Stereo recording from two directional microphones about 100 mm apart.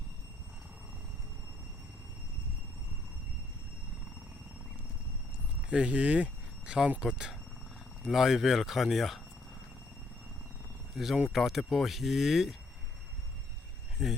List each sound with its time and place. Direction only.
5.6 s speech: 15° right (ahead or behind)
10.9 s speech: centre (ahead or behind)
14.0 s speech: 5° right (ahead or behind)